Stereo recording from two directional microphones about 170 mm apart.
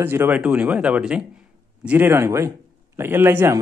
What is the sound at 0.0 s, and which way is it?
A man's voice, 10° right (ahead or behind).